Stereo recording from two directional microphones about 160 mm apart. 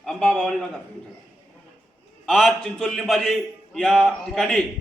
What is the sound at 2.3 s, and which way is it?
A man's voice, centre (ahead or behind).